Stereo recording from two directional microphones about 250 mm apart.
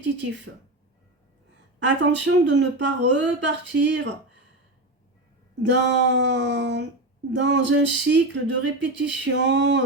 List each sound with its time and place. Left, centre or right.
0.0 s speech: right
1.8 s speech: right
5.6 s speech: right